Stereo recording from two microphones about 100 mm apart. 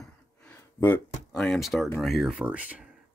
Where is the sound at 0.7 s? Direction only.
20° left (ahead or behind).